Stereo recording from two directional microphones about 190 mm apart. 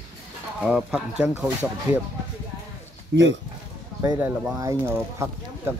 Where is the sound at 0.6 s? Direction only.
5° right (ahead or behind).